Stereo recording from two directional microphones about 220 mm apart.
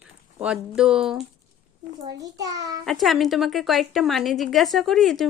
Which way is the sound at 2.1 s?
15° right (ahead or behind).